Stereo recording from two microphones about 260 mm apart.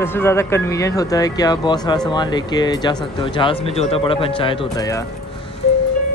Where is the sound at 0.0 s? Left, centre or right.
Centre.